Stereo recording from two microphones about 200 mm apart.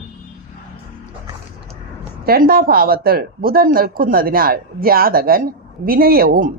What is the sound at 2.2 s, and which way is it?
Speech, 50° right (ahead or behind).